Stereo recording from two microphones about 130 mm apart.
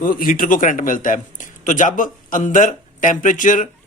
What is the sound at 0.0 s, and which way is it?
Speech, 90° left.